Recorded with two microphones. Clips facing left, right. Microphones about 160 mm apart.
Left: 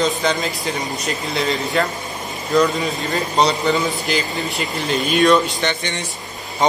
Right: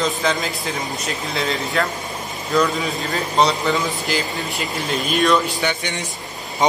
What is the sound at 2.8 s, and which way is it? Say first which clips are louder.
A man's voice: left 2 dB; centre (ahead or behind).